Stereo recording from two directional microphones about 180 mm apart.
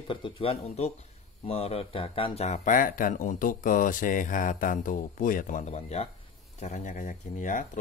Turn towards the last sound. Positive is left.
turn(degrees=45)  # may be behind; listen again after turning